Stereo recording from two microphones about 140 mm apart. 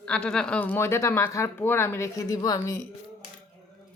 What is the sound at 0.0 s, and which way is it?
Speech, 5° left (ahead or behind).